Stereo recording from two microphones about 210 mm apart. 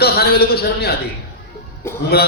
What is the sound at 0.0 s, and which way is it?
Speech, 45° left (ahead or behind).